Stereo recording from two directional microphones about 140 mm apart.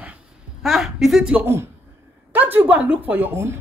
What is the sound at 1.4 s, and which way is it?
Speech, 20° right (ahead or behind).